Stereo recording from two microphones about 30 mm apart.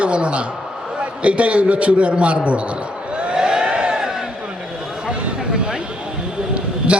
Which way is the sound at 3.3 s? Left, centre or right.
Right.